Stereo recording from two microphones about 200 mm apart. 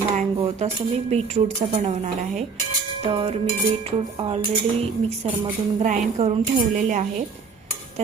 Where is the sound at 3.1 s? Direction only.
25° right (ahead or behind).